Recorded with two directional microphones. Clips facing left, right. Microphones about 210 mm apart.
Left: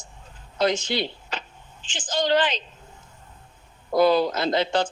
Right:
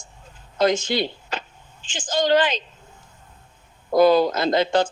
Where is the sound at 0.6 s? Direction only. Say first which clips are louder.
Right 3 dB; 45° right (ahead or behind).